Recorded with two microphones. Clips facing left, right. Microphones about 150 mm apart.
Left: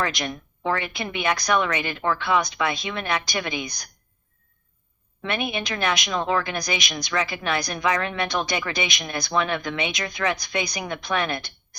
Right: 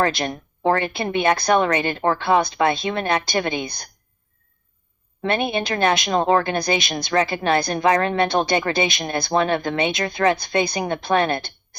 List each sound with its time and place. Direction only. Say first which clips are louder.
0.0 s speech: right 6 dB; 30° right (ahead or behind)
0.3 s a woman's voice: right 6 dB; 40° right (ahead or behind)
5.2 s a woman's voice: right 6 dB; 30° right (ahead or behind)
6.1 s a woman's voice: right 6 dB; 40° right (ahead or behind)